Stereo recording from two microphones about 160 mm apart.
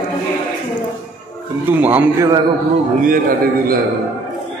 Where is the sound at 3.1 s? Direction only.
65° right (ahead or behind).